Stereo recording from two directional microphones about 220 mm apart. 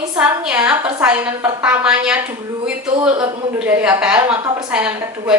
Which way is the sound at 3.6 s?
5° right (ahead or behind).